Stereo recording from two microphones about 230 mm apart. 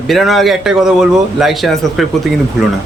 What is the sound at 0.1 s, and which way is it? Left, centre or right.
A man's voice, centre.